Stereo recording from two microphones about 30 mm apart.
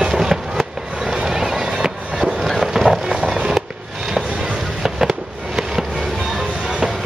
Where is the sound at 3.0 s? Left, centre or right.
Right.